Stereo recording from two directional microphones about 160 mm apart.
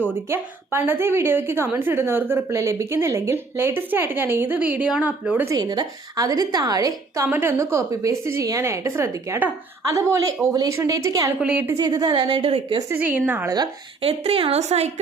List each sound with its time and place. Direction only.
0.3 s a woman's voice: 15° right (ahead or behind)
5.5 s a woman's voice: 25° right (ahead or behind)
11.3 s a woman's voice: 5° right (ahead or behind)
11.8 s a woman's voice: 25° right (ahead or behind)
13.1 s a woman's voice: 10° right (ahead or behind)
14.0 s a woman's voice: 40° right (ahead or behind)